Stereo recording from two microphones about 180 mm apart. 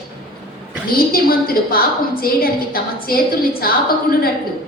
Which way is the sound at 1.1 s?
55° left (ahead or behind).